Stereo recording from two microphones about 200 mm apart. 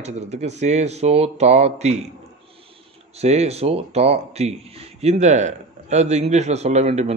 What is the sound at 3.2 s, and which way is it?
A man's voice, 30° right (ahead or behind).